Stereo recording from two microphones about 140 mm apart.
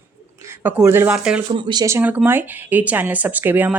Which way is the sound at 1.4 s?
35° right (ahead or behind).